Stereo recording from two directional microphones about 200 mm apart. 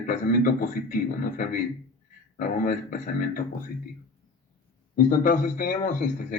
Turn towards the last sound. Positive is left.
turn(degrees=40)  # may be behind; listen again after turning